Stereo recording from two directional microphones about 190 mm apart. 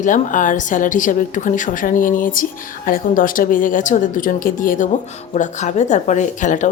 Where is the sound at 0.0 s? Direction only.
45° left (ahead or behind).